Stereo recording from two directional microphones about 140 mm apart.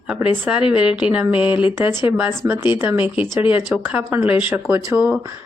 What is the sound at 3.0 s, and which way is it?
Speech, 40° left (ahead or behind).